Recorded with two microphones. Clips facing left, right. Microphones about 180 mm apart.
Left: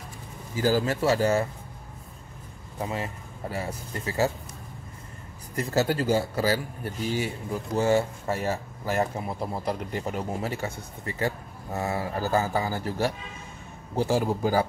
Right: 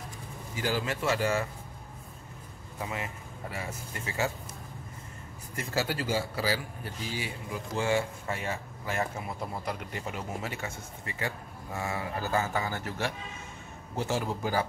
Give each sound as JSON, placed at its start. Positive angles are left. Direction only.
{"t": 0.6, "sound": "a man's voice", "side_deg": 40}
{"t": 2.8, "sound": "a man's voice", "side_deg": 35}
{"t": 5.6, "sound": "a man's voice", "side_deg": 40}